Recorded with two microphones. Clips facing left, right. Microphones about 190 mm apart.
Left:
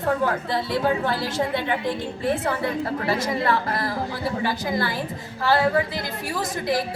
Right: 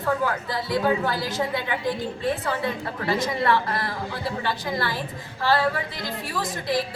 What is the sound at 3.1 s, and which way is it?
A woman's voice, 25° left (ahead or behind).